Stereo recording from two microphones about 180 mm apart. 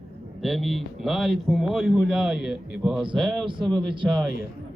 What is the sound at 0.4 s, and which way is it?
A man's voice, centre (ahead or behind).